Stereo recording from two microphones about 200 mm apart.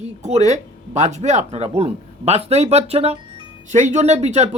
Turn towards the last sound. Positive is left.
turn(degrees=-35)  # may be behind; listen again after turning